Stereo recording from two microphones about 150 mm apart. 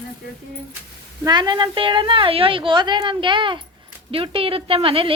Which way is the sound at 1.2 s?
30° right (ahead or behind).